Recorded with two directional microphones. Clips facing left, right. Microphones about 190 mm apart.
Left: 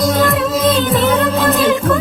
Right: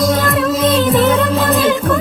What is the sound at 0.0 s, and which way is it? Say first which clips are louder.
Music: even; centre (ahead or behind).